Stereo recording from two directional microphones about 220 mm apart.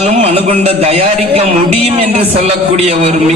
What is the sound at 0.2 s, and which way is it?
A man's voice, 30° right (ahead or behind).